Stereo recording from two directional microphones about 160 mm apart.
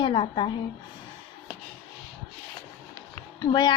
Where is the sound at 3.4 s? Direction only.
30° left (ahead or behind).